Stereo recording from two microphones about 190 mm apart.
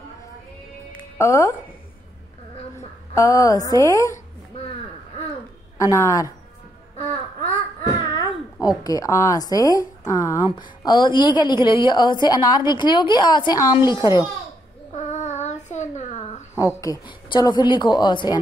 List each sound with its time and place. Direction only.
0.9 s music: 15° left (ahead or behind)
3.2 s a woman's voice: 15° left (ahead or behind)
5.8 s a woman's voice: 15° left (ahead or behind)
8.1 s a woman's voice: 20° left (ahead or behind)
14.9 s child singing: 35° left (ahead or behind)
16.5 s a woman's voice: 20° left (ahead or behind)